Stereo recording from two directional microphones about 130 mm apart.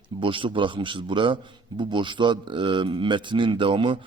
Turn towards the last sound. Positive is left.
turn(degrees=-40)  # may be behind; listen again after turning